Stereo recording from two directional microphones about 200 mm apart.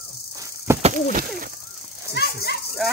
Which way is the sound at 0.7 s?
15° right (ahead or behind).